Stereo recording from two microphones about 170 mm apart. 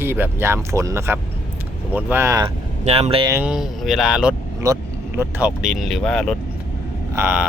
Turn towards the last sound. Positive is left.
turn(degrees=-10)  # may be behind; listen again after turning